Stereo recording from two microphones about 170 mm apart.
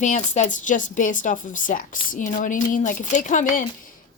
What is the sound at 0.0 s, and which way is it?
Speech, 45° left (ahead or behind).